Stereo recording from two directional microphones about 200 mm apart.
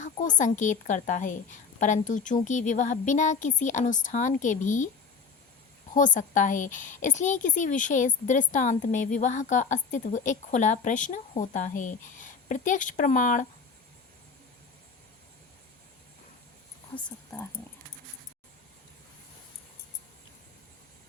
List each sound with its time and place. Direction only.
0.0 s a woman's voice: 40° left (ahead or behind)
5.9 s a woman's voice: 40° left (ahead or behind)